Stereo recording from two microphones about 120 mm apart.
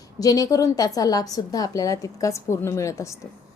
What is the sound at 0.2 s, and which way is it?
A woman's voice, 30° left (ahead or behind).